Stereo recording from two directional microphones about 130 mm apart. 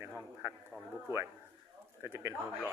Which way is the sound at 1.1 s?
25° right (ahead or behind).